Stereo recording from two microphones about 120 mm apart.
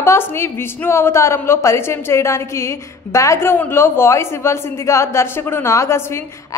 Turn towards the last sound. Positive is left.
turn(degrees=20)  # may be behind; listen again after turning